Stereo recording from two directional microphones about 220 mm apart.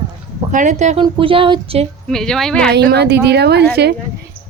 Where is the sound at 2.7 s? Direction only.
50° right (ahead or behind).